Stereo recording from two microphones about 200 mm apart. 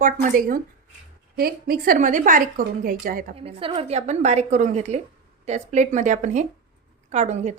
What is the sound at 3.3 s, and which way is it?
A woman's voice, 30° right (ahead or behind).